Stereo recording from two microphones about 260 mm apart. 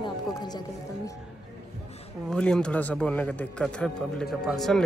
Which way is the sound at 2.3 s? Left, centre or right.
Centre.